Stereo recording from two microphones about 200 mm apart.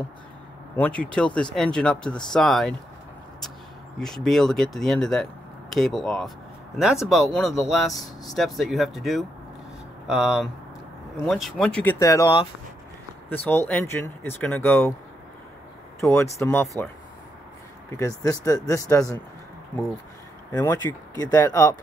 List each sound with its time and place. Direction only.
0.7 s speech: 5° left (ahead or behind)
4.0 s speech: centre (ahead or behind)
12.0 s speech: 15° left (ahead or behind)
16.0 s speech: 15° left (ahead or behind)
17.9 s speech: 15° left (ahead or behind)
20.5 s speech: 15° left (ahead or behind)